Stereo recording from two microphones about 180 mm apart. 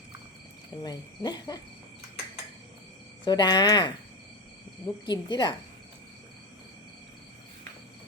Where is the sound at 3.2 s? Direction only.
25° left (ahead or behind).